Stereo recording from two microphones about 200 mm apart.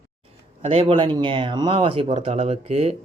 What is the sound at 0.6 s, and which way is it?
Speech, 30° right (ahead or behind).